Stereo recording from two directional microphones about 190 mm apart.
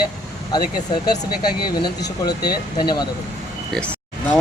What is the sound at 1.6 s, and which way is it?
Speech, 25° left (ahead or behind).